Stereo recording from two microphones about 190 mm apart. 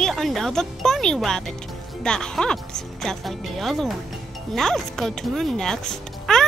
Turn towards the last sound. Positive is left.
turn(degrees=0)  # may be behind; listen again after turning